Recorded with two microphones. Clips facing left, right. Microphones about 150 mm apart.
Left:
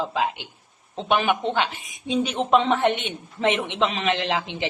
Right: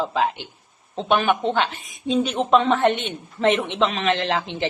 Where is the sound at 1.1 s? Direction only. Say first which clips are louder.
Right 2 dB; 15° left (ahead or behind).